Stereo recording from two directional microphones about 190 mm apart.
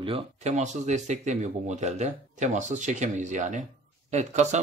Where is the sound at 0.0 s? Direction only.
30° right (ahead or behind).